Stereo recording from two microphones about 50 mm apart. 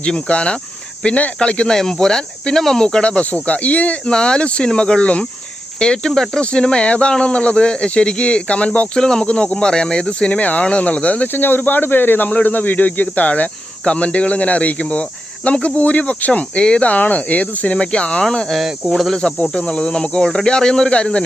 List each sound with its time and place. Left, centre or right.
0.0 s speech: left
4.0 s speech: centre
9.0 s speech: centre
11.3 s speech: left
12.3 s speech: left
18.3 s speech: centre